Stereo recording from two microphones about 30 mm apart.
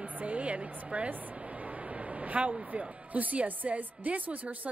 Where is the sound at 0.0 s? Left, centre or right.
Right.